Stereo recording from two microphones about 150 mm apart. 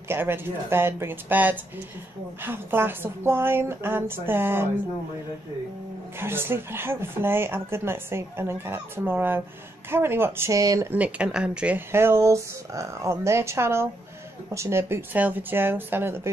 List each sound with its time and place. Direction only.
0.1 s speech: 15° right (ahead or behind)
6.1 s speech: 15° right (ahead or behind)
10.9 s speech: 10° right (ahead or behind)